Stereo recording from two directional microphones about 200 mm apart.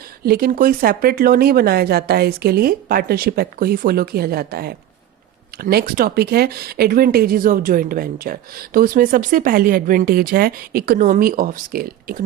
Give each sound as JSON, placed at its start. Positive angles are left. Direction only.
{"t": 0.3, "sound": "speech", "side_deg": -50}